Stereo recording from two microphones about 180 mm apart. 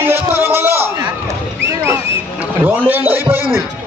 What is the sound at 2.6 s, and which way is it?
Speech, 10° right (ahead or behind).